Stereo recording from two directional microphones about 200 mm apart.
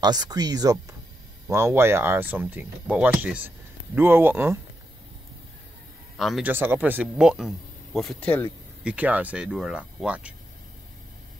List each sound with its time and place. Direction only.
0.0 s speech: 20° right (ahead or behind)
6.1 s speech: centre (ahead or behind)
8.8 s speech: 5° right (ahead or behind)